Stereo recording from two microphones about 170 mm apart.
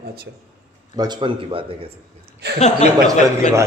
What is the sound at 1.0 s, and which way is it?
Speech, 25° right (ahead or behind).